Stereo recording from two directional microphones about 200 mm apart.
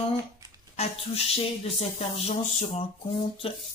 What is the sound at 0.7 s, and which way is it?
Speech, 35° left (ahead or behind).